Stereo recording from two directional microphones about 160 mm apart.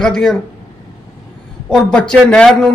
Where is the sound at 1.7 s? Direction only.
5° left (ahead or behind).